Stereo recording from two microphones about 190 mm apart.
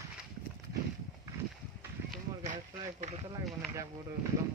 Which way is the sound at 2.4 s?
40° right (ahead or behind).